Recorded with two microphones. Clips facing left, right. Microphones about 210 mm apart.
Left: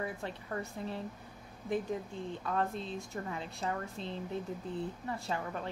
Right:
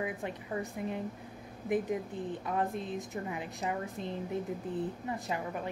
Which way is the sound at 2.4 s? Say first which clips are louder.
Even; 15° right (ahead or behind).